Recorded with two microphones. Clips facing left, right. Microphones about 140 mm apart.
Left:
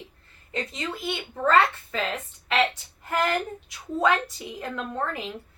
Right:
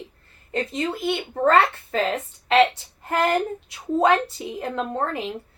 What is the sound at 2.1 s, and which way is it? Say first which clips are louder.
A woman's voice: right 7 dB; 35° right (ahead or behind).